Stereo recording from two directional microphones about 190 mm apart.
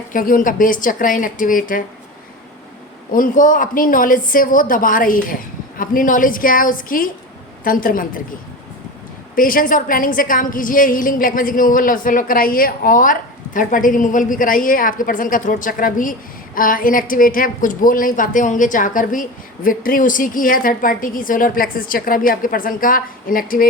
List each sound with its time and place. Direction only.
0.1 s a woman's voice: 45° left (ahead or behind)
3.1 s a woman's voice: 45° left (ahead or behind)
9.3 s a woman's voice: 45° left (ahead or behind)